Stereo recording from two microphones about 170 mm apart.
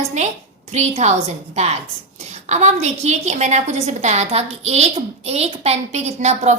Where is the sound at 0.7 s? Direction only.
40° right (ahead or behind).